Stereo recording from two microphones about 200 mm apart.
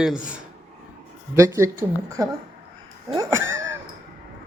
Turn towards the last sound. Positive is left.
turn(degrees=-15)  # may be behind; listen again after turning